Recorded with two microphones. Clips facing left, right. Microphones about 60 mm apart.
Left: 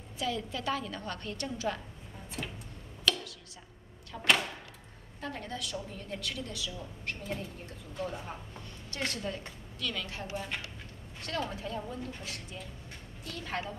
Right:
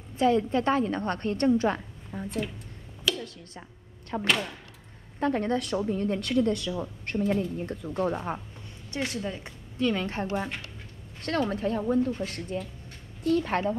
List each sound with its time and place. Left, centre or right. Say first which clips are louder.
0.2 s a woman's voice: right 11 dB; right
3.1 s a sound: right 2 dB; centre
4.1 s speech: right 1 dB; right
8.9 s a woman's voice: right 4 dB; centre
9.8 s a woman's voice: right 11 dB; right